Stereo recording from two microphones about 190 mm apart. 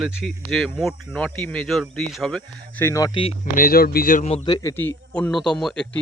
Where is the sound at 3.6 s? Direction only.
50° left (ahead or behind).